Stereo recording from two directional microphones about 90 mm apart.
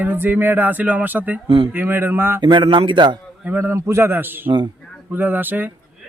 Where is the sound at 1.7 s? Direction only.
25° right (ahead or behind).